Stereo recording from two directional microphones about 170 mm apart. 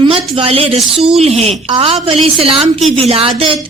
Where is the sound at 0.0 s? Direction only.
30° right (ahead or behind).